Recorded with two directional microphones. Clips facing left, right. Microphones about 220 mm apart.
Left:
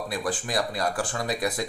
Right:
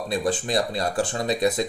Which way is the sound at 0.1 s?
25° right (ahead or behind).